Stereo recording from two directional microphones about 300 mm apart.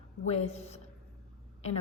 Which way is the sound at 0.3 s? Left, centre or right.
Left.